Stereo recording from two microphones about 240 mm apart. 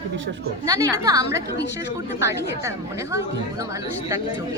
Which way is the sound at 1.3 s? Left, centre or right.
Left.